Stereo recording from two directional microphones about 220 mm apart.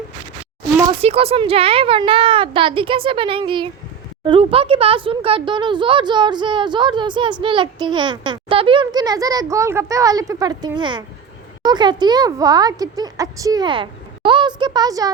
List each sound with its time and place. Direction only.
0.9 s speech: 25° right (ahead or behind)